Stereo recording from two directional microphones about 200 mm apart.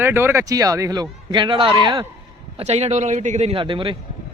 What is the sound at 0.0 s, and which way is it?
Speech, 10° right (ahead or behind).